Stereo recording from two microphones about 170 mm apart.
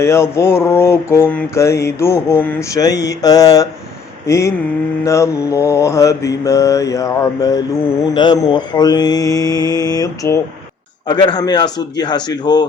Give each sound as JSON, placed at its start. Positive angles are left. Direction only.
{"t": 0.0, "sound": "mantra", "side_deg": 15}